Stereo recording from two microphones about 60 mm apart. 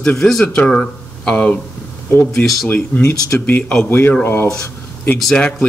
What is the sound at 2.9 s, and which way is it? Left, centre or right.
A man's voice, left.